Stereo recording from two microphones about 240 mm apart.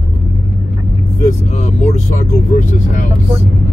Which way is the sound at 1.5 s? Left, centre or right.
Left.